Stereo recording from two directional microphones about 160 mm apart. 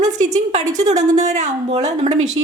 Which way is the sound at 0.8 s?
50° right (ahead or behind).